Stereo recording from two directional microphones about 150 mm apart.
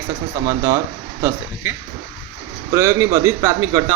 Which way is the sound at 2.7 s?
20° right (ahead or behind).